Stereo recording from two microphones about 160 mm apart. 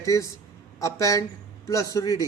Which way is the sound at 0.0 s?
20° left (ahead or behind).